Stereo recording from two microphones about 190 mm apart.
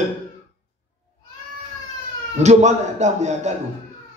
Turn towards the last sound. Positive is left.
turn(degrees=-35)  # may be behind; listen again after turning